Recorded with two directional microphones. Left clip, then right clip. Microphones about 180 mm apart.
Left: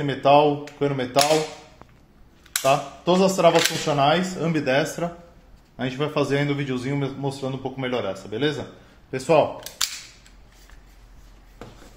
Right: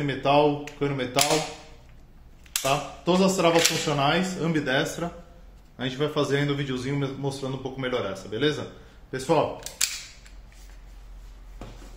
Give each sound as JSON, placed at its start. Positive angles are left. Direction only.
{"t": 0.0, "sound": "a man's voice", "side_deg": 40}
{"t": 2.6, "sound": "a man's voice", "side_deg": 40}